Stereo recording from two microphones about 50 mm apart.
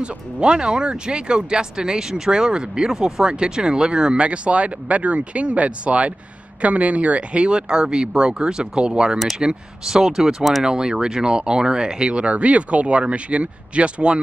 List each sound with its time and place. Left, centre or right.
0.0 s speech: centre
10.6 s speech: centre